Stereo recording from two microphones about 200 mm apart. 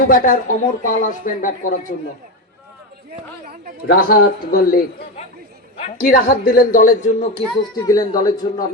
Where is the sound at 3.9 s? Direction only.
45° left (ahead or behind).